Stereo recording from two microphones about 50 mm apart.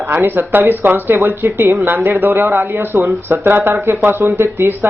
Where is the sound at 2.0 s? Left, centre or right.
Right.